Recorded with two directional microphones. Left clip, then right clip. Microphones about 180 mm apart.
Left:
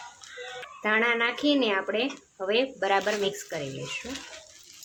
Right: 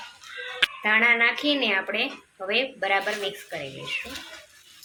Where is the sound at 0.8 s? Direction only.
35° left (ahead or behind).